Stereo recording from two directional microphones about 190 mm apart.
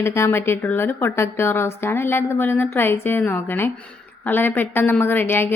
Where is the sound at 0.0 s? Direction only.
15° left (ahead or behind).